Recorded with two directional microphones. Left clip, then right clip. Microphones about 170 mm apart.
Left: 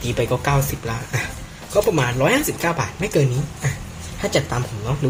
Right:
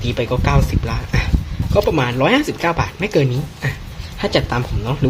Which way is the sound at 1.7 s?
25° right (ahead or behind).